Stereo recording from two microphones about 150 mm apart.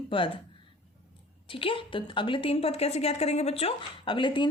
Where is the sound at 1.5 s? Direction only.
35° left (ahead or behind).